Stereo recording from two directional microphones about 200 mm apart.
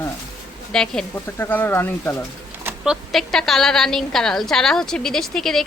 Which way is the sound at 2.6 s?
5° right (ahead or behind).